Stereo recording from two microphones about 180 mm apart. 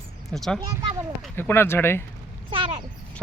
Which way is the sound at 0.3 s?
Centre (ahead or behind).